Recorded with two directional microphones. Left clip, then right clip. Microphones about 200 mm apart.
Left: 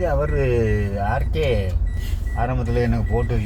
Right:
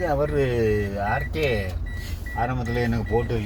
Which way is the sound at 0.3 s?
20° left (ahead or behind).